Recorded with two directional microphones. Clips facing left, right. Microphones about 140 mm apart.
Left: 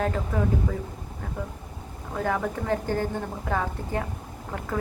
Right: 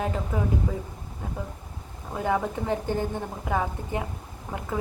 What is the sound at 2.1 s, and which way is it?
Speech, 15° right (ahead or behind).